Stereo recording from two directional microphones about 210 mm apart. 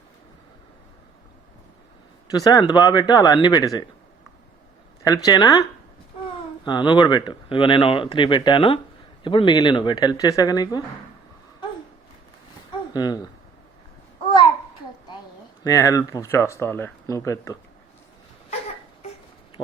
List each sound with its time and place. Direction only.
2.3 s speech: 20° left (ahead or behind)
5.0 s speech: 20° left (ahead or behind)
6.7 s speech: 20° left (ahead or behind)
12.9 s speech: 20° left (ahead or behind)
15.6 s speech: 15° left (ahead or behind)
19.6 s speech: 20° left (ahead or behind)